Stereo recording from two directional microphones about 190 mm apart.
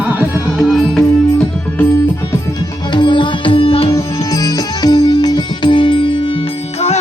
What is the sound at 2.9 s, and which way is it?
Music, 25° left (ahead or behind).